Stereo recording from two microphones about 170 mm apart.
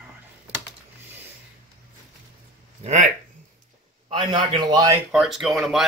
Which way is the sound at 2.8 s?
40° right (ahead or behind).